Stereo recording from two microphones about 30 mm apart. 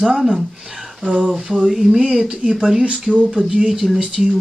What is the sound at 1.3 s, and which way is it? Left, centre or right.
Speech, centre.